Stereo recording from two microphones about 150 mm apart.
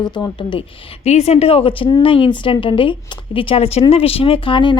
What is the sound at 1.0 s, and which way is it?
A woman's voice, 45° left (ahead or behind).